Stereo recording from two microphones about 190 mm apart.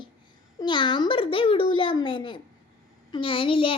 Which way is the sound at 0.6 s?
25° left (ahead or behind).